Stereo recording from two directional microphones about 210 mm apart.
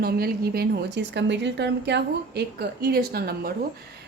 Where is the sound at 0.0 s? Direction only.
50° right (ahead or behind).